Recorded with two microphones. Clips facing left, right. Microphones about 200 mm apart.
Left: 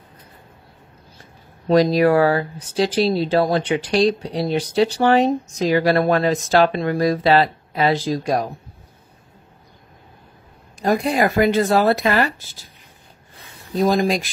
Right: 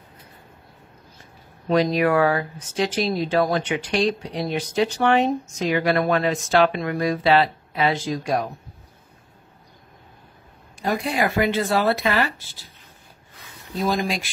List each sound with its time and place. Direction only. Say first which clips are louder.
1.7 s speech: left 4 dB; 35° left (ahead or behind)
10.8 s speech: left 5 dB; 40° left (ahead or behind)
13.7 s speech: left 6 dB; 40° left (ahead or behind)